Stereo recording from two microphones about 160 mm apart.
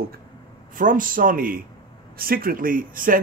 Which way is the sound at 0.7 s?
60° right (ahead or behind).